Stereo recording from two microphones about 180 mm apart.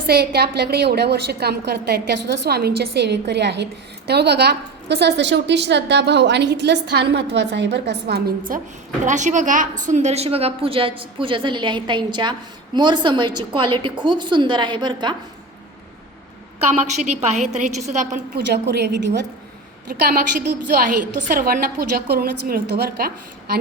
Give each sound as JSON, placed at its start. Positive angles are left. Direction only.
{"t": 0.1, "sound": "a woman's voice", "side_deg": -60}
{"t": 9.0, "sound": "a woman's voice", "side_deg": -45}
{"t": 16.7, "sound": "a woman's voice", "side_deg": -40}
{"t": 18.5, "sound": "a woman's voice", "side_deg": -70}
{"t": 19.9, "sound": "a woman's voice", "side_deg": -55}
{"t": 21.2, "sound": "a woman's voice", "side_deg": -50}